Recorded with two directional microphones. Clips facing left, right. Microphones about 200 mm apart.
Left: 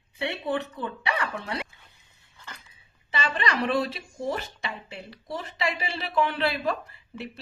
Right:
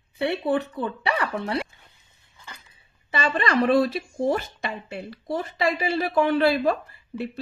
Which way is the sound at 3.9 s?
50° right (ahead or behind).